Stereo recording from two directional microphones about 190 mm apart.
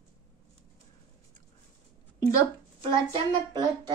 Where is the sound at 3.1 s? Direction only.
25° right (ahead or behind).